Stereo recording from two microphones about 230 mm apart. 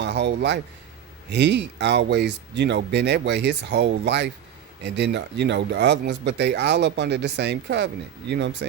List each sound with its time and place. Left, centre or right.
0.0 s speech: right